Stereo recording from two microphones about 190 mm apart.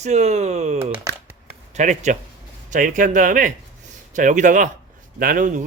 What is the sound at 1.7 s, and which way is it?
Speech, 40° right (ahead or behind).